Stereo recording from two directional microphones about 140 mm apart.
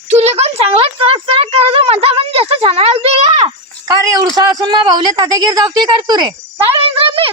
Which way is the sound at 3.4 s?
25° right (ahead or behind).